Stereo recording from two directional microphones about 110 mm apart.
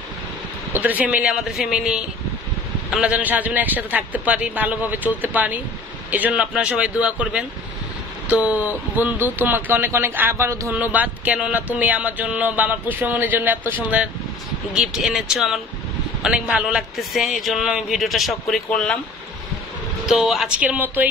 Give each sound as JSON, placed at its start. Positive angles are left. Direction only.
{"t": 0.7, "sound": "speech", "side_deg": -15}
{"t": 10.7, "sound": "a man's voice", "side_deg": -15}
{"t": 18.7, "sound": "speech", "side_deg": 10}
{"t": 20.1, "sound": "speech", "side_deg": -5}